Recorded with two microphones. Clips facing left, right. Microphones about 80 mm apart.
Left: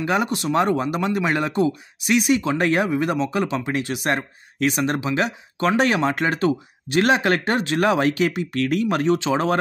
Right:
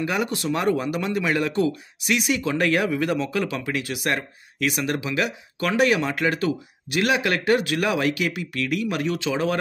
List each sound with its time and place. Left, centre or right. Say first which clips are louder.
0.0 s speech: left 3 dB; left